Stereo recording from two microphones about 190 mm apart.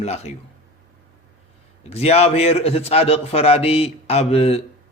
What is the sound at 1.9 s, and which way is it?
Speech, 30° left (ahead or behind).